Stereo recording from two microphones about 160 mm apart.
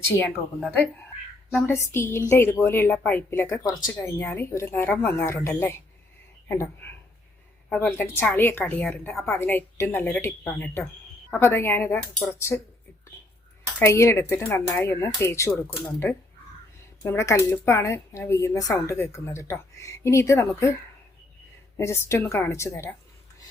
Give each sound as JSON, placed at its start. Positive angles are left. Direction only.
{"t": 0.1, "sound": "a child's voice", "side_deg": 15}
{"t": 4.2, "sound": "speech", "side_deg": 10}
{"t": 7.7, "sound": "a woman's voice", "side_deg": 10}
{"t": 13.7, "sound": "speech", "side_deg": 15}
{"t": 17.0, "sound": "speech", "side_deg": 15}
{"t": 21.8, "sound": "speech", "side_deg": 20}